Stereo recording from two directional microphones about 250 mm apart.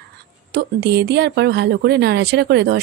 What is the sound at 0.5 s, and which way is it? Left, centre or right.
Speech, right.